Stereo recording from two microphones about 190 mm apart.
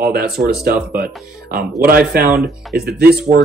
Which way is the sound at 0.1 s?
55° right (ahead or behind).